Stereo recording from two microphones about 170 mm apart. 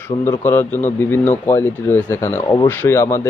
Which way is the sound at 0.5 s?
10° left (ahead or behind).